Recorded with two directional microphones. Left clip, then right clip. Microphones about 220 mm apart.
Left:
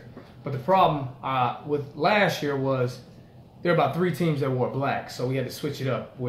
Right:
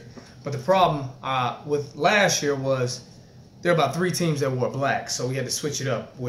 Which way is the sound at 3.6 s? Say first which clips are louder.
Right 1 dB; 10° right (ahead or behind).